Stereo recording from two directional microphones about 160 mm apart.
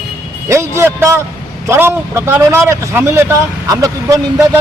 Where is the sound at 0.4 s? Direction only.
20° right (ahead or behind).